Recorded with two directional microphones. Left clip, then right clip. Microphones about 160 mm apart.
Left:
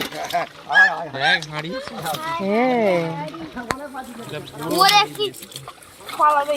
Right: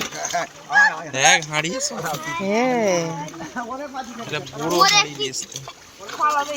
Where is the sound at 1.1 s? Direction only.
40° right (ahead or behind).